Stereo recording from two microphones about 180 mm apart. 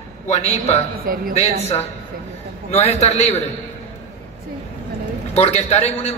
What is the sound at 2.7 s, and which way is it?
Speech, 35° left (ahead or behind).